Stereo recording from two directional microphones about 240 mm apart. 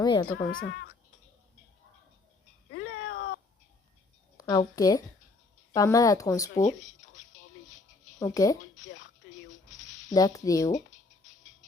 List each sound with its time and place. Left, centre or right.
0.0 s speech: centre
0.3 s speech: left
2.7 s a sound: left
4.4 s a woman's voice: centre
6.7 s speech: left
8.2 s speech: centre
8.7 s a sound: left
10.2 s speech: centre